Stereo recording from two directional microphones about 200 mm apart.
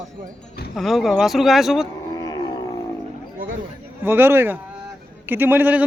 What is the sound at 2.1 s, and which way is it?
Roaring cats, 20° left (ahead or behind).